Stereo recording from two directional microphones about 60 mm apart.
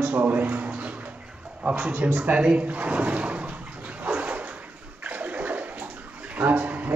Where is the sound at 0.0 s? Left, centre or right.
Right.